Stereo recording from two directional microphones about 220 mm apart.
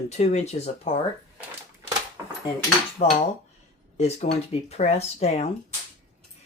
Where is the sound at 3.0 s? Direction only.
30° left (ahead or behind).